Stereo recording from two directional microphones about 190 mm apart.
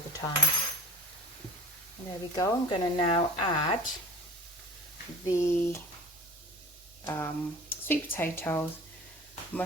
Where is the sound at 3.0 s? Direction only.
30° left (ahead or behind).